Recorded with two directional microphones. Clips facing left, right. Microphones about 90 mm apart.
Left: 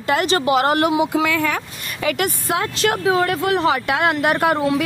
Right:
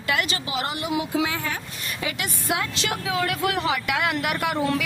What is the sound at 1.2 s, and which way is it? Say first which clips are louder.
Speech: left 8 dB; 70° left (ahead or behind).